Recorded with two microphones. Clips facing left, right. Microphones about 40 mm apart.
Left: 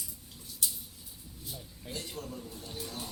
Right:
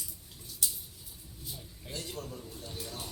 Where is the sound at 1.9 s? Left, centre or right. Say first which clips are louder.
Even; left.